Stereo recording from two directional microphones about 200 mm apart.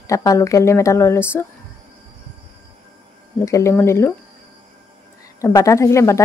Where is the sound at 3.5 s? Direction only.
15° left (ahead or behind).